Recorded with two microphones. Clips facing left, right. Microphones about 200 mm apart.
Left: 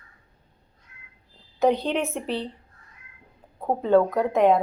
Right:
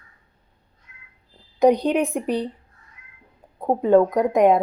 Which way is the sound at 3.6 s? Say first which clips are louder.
Right 3 dB; 15° right (ahead or behind).